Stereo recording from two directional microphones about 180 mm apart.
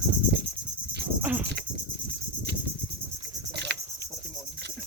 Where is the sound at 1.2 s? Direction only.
10° right (ahead or behind).